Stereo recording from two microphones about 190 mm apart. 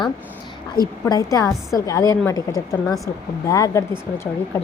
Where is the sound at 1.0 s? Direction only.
20° left (ahead or behind).